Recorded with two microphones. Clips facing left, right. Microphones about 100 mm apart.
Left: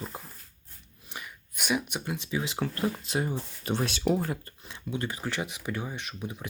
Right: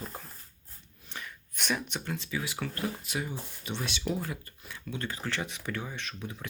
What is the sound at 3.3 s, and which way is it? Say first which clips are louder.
Speech: left 7 dB; 45° left (ahead or behind).